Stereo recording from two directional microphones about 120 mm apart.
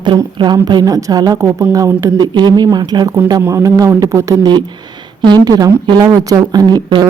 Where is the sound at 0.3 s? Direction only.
35° right (ahead or behind).